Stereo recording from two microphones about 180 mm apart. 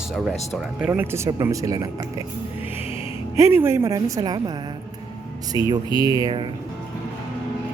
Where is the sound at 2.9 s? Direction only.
15° right (ahead or behind).